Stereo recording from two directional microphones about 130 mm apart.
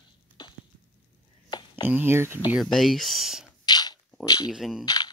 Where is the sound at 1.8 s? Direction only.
15° right (ahead or behind).